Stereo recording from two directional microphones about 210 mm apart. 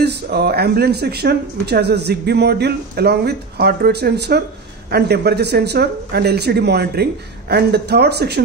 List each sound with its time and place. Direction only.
0.0 s speech: 50° right (ahead or behind)